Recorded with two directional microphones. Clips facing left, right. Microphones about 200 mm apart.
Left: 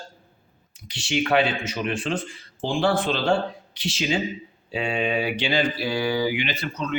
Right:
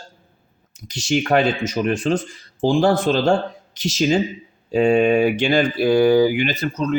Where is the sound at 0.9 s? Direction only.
40° right (ahead or behind).